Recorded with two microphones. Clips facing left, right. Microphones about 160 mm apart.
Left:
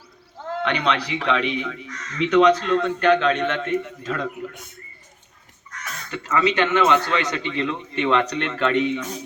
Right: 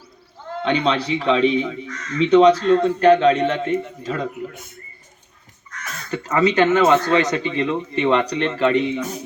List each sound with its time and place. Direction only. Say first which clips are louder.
0.6 s speech: right 4 dB; 25° right (ahead or behind)
6.1 s speech: right 3 dB; 35° right (ahead or behind)
9.0 s a man's voice: right 4 dB; 10° right (ahead or behind)